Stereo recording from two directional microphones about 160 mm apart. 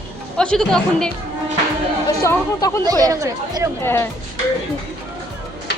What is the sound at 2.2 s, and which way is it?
Speech, 20° left (ahead or behind).